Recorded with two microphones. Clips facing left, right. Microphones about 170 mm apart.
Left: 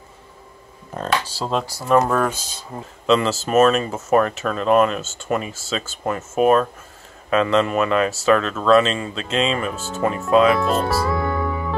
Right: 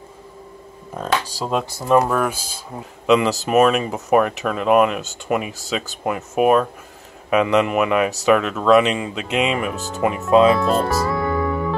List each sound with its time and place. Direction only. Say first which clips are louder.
0.9 s speech: even; 10° right (ahead or behind); by 10.6 s 25° right (ahead or behind)
10.6 s music: right 1 dB; centre (ahead or behind)